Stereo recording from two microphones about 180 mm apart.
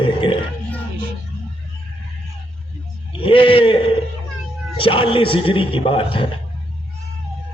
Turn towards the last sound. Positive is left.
turn(degrees=30)  # may be behind; listen again after turning